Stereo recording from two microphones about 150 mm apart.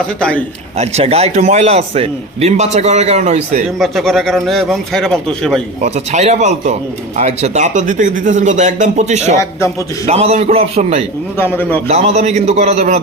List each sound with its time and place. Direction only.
0.2 s a man's voice: 5° left (ahead or behind)
0.8 s a man's voice: 45° right (ahead or behind)
3.8 s a man's voice: centre (ahead or behind)
5.8 s a man's voice: 45° right (ahead or behind)
11.3 s a man's voice: 15° left (ahead or behind)
11.9 s a man's voice: 45° right (ahead or behind)